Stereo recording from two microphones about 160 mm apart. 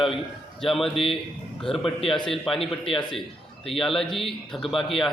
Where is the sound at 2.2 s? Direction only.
Centre (ahead or behind).